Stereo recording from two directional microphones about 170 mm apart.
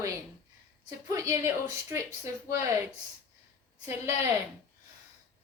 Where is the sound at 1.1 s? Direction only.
20° right (ahead or behind).